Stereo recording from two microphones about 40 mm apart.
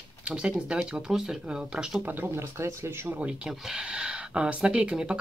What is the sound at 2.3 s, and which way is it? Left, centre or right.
Speech, right.